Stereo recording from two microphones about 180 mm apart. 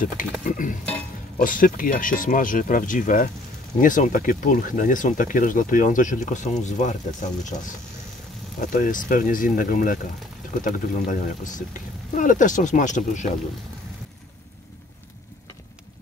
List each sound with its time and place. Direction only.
0.0 s speech: 50° left (ahead or behind)
8.5 s speech: 50° left (ahead or behind)